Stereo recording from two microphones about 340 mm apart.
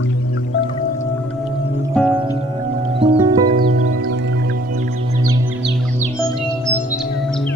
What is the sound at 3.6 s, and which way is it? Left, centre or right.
Music, right.